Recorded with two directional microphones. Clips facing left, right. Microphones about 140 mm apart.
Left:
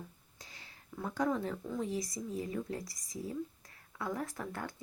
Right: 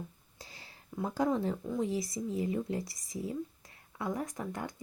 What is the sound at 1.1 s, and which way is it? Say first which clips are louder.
Speech: right 3 dB; 30° right (ahead or behind).